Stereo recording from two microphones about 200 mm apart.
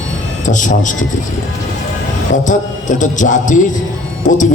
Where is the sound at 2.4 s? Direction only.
40° left (ahead or behind).